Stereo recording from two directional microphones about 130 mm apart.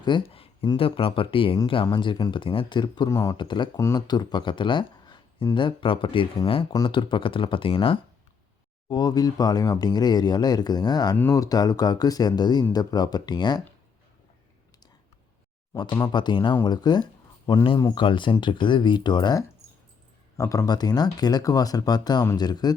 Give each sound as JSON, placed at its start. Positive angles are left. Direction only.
{"t": 0.0, "sound": "a sound", "side_deg": 40}
{"t": 0.7, "sound": "speech", "side_deg": 45}
{"t": 3.1, "sound": "speech", "side_deg": 25}
{"t": 3.3, "sound": "speech", "side_deg": 35}
{"t": 3.8, "sound": "speech", "side_deg": 20}
{"t": 4.0, "sound": "speech", "side_deg": 35}
{"t": 15.8, "sound": "speech", "side_deg": 30}